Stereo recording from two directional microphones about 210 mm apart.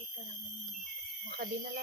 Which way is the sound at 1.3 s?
45° right (ahead or behind).